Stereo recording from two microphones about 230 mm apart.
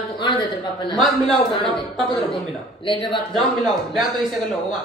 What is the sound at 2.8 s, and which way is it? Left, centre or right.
Speech, left.